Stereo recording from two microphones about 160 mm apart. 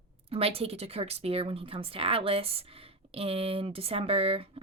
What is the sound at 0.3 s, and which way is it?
Speech, 35° right (ahead or behind).